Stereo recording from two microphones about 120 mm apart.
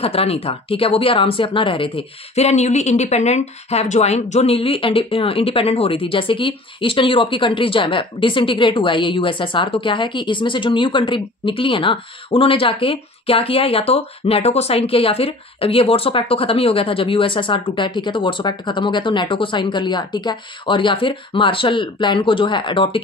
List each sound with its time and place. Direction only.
0.0 s speech: 55° left (ahead or behind)
2.3 s speech: 70° left (ahead or behind); by 23.0 s 45° left (ahead or behind)